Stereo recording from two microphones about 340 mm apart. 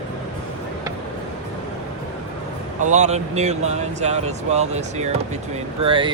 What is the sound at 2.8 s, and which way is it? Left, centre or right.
Speech, right.